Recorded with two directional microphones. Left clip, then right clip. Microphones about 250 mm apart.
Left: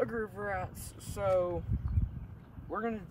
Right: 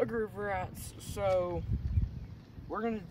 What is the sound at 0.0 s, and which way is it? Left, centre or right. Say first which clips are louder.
Speech: right 1 dB; centre.